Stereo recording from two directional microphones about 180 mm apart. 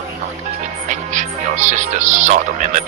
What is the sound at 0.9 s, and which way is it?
Speech, 40° right (ahead or behind).